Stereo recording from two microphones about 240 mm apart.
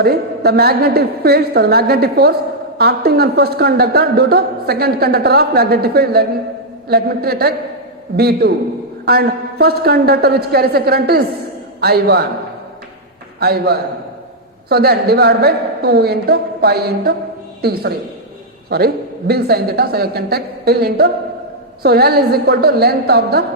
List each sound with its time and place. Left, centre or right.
0.0 s a woman's voice: right
13.4 s a woman's voice: right